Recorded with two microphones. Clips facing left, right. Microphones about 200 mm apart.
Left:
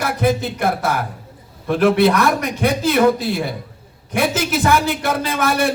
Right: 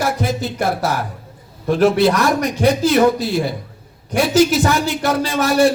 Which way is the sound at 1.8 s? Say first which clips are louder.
Even; 55° left (ahead or behind).